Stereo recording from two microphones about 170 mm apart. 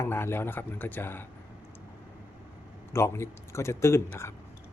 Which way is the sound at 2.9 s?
15° left (ahead or behind).